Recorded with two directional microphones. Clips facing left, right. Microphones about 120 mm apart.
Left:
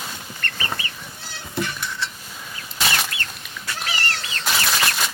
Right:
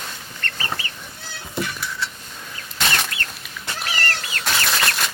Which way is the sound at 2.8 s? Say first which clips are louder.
Even; 5° left (ahead or behind).